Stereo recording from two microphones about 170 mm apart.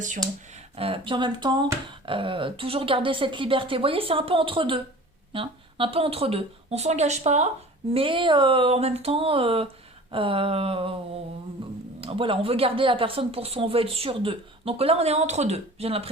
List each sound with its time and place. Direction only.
0.5 s speech: 35° right (ahead or behind)
7.9 s speech: 30° right (ahead or behind)
11.6 s a sound: 30° right (ahead or behind)
11.9 s speech: 35° right (ahead or behind)